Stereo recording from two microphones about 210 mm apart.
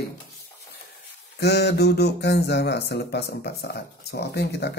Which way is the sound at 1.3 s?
50° left (ahead or behind).